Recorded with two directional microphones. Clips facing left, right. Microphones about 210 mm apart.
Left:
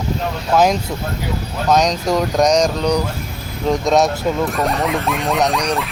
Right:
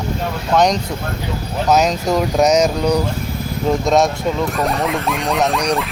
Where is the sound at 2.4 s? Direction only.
5° right (ahead or behind).